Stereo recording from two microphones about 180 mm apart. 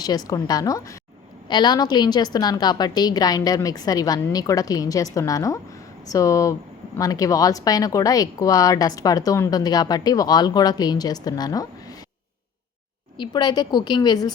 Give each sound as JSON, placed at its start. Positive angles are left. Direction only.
{"t": 0.0, "sound": "a woman's voice", "side_deg": 20}
{"t": 13.1, "sound": "a woman's voice", "side_deg": 25}